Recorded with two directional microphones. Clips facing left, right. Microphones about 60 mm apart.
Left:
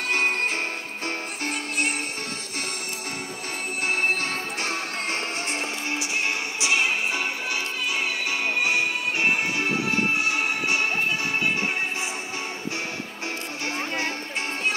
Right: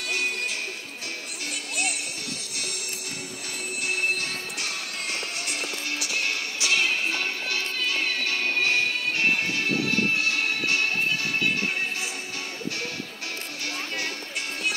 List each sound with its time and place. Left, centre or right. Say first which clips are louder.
0.1 s music: left 5 dB; left
3.8 s music: left 3 dB; left
5.5 s music: left 3 dB; left
13.7 s music: left 4 dB; left